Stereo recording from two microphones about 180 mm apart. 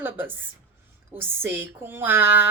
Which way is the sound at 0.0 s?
10° right (ahead or behind).